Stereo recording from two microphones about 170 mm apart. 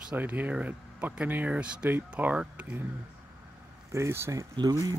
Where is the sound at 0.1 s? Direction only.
10° right (ahead or behind).